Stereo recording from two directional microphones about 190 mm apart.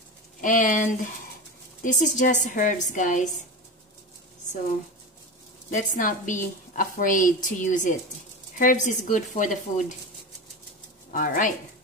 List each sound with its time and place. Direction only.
0.4 s a woman's voice: 45° left (ahead or behind)
5.8 s a woman's voice: 40° left (ahead or behind)
11.1 s speech: 45° left (ahead or behind)